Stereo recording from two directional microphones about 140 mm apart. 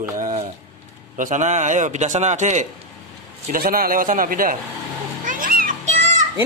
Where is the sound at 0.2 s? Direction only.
60° right (ahead or behind).